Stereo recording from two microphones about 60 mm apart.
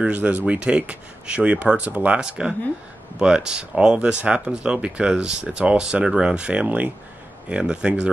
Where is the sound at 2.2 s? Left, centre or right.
Centre.